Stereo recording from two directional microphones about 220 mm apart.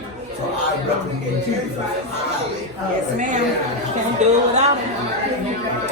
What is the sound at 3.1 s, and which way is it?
A woman's voice, 35° right (ahead or behind).